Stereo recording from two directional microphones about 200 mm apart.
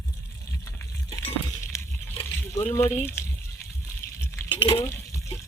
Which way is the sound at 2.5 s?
15° left (ahead or behind).